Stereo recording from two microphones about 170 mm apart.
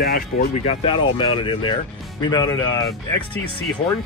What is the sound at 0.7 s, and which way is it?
Speech, 30° left (ahead or behind).